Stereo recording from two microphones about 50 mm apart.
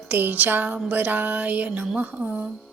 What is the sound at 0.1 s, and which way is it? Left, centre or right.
Music, right.